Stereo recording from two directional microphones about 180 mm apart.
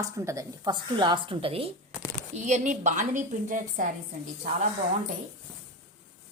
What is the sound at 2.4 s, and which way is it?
A woman's voice, 40° right (ahead or behind).